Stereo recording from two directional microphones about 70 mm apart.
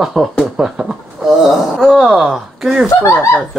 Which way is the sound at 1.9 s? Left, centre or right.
Centre.